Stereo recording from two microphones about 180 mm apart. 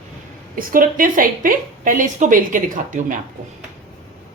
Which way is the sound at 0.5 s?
50° right (ahead or behind).